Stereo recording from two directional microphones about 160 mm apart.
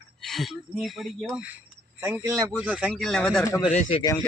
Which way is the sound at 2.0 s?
15° right (ahead or behind).